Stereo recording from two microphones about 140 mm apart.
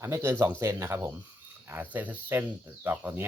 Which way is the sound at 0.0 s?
20° right (ahead or behind).